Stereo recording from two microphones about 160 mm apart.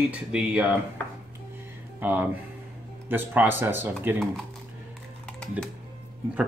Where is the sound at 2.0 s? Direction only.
10° right (ahead or behind).